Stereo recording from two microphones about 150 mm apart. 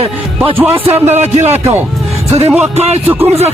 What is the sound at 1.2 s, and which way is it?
Speech, 50° right (ahead or behind).